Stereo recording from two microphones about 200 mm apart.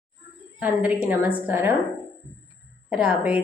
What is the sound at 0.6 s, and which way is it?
A woman's voice, 10° right (ahead or behind).